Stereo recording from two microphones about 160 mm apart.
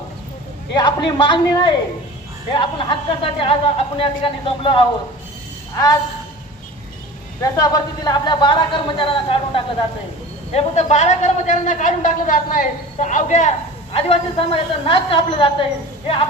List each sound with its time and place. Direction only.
0.8 s speech: 25° left (ahead or behind)
7.4 s a man's voice: 20° left (ahead or behind); by 13.5 s 50° left (ahead or behind)
13.9 s speech: 35° left (ahead or behind)